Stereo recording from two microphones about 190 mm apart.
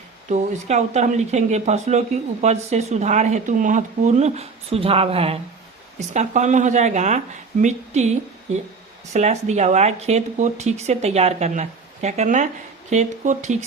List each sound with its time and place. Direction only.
0.3 s speech: 35° right (ahead or behind)
9.1 s speech: 35° right (ahead or behind)